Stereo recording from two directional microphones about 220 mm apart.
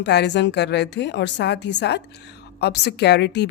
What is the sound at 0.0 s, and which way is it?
A woman's voice, 50° left (ahead or behind).